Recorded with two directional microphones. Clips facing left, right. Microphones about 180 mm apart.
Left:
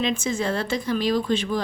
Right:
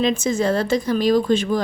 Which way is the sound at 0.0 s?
40° right (ahead or behind).